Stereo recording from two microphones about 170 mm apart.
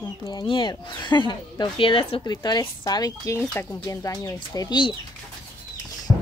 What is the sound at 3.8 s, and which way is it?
A woman's voice, 20° left (ahead or behind).